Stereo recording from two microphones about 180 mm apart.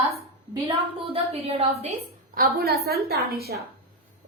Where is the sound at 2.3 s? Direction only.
60° right (ahead or behind).